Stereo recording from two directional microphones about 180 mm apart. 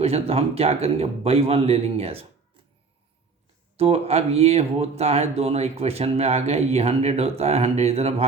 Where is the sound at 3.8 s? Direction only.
35° right (ahead or behind).